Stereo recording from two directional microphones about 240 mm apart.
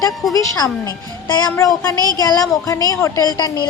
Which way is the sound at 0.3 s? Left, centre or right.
Centre.